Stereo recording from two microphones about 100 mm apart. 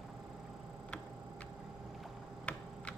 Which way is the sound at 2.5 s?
10° left (ahead or behind).